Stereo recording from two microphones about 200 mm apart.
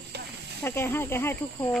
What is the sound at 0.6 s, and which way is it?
Speech, 10° left (ahead or behind).